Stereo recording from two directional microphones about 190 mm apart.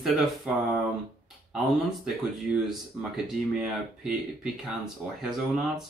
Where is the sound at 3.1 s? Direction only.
5° right (ahead or behind).